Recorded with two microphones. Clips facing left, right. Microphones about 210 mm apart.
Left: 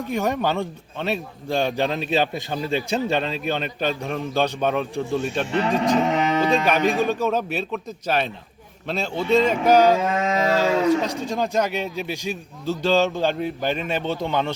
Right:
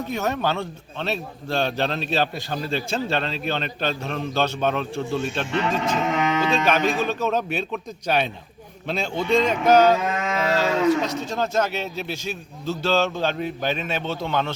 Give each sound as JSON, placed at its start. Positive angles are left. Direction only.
{"t": 0.1, "sound": "speech", "side_deg": 15}
{"t": 5.5, "sound": "speech", "side_deg": 35}
{"t": 5.7, "sound": "speech", "side_deg": 15}
{"t": 6.0, "sound": "a sound", "side_deg": 35}
{"t": 6.7, "sound": "speech", "side_deg": 15}